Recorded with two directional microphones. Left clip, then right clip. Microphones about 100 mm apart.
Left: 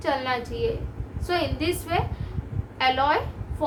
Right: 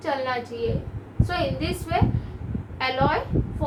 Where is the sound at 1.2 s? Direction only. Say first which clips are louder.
Left 1 dB; 50° left (ahead or behind).